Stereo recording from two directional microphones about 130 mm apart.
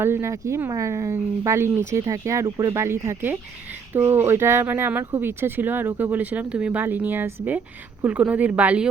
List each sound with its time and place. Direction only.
0.0 s speech: 20° right (ahead or behind)